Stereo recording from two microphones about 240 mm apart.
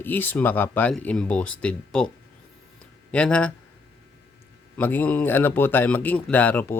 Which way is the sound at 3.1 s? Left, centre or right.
Centre.